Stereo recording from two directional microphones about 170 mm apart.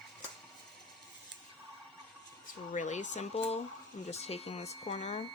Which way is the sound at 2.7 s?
45° left (ahead or behind).